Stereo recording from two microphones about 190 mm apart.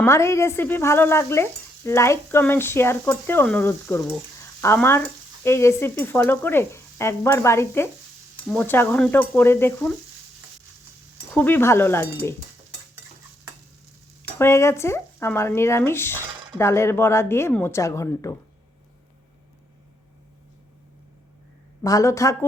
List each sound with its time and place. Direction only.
0.0 s stir: 15° left (ahead or behind)
4.4 s frying: 15° left (ahead or behind)
8.4 s stir: 10° left (ahead or behind)
11.3 s stir: 10° left (ahead or behind)
14.2 s speech: 10° left (ahead or behind)
16.6 s stir: 15° left (ahead or behind)
21.8 s stir: 15° left (ahead or behind)